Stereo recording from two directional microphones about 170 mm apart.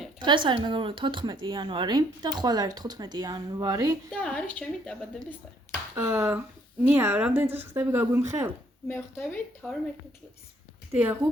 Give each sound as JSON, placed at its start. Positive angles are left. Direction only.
{"t": 0.2, "sound": "speech", "side_deg": -30}
{"t": 4.2, "sound": "a woman's voice", "side_deg": 10}
{"t": 6.0, "sound": "speech", "side_deg": -15}
{"t": 8.9, "sound": "a woman's voice", "side_deg": 15}
{"t": 9.6, "sound": "speech", "side_deg": 0}
{"t": 10.9, "sound": "speech", "side_deg": -15}